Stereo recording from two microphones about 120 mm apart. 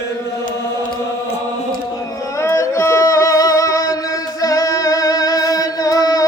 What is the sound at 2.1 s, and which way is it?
Music, 25° left (ahead or behind).